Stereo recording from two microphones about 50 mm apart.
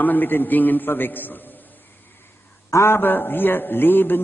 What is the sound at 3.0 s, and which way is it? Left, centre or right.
A man's voice, left.